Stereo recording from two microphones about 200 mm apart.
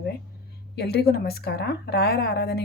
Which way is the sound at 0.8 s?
55° left (ahead or behind).